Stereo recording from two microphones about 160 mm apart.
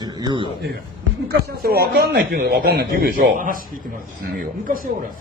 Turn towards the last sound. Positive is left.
turn(degrees=-60)  # may be behind; listen again after turning